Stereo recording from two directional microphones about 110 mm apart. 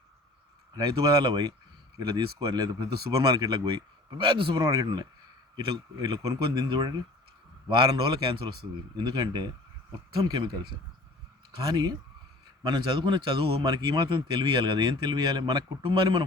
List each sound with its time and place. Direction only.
0.7 s speech: 45° right (ahead or behind)
4.6 s speech: 35° right (ahead or behind)
9.0 s speech: 40° right (ahead or behind)